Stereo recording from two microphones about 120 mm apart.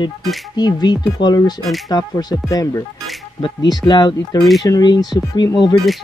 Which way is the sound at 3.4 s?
40° left (ahead or behind).